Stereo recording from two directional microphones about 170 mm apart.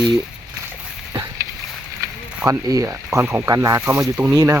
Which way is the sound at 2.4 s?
20° right (ahead or behind).